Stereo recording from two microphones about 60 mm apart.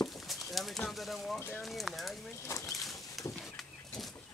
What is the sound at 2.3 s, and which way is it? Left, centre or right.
Speech, left.